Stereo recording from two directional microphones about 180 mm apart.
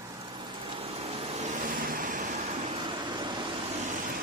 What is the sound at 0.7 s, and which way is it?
Vehicle, 35° right (ahead or behind).